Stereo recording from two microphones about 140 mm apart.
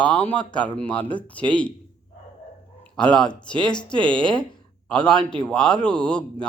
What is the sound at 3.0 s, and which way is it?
Speech, 5° left (ahead or behind).